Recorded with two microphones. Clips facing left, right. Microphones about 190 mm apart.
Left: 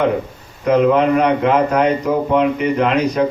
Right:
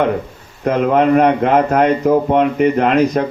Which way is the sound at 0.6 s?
50° right (ahead or behind).